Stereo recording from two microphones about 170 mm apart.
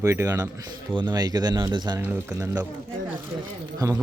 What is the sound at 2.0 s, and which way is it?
Speech, 10° right (ahead or behind).